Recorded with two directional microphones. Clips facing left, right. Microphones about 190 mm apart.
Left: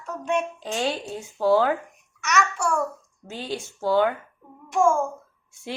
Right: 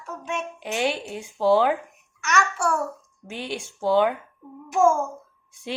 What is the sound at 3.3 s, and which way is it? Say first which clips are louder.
Speech: even; 15° right (ahead or behind).